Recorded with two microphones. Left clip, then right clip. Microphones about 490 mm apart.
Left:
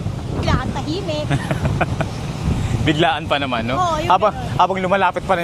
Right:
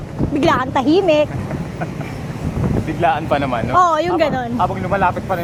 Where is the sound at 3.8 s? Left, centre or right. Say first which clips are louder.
Right 4 dB; right.